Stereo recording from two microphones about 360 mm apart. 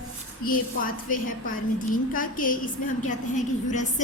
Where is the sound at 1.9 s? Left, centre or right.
Left.